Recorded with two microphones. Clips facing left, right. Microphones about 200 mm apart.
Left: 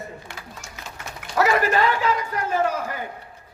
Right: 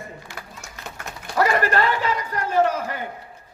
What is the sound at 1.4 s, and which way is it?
Speech, 5° left (ahead or behind).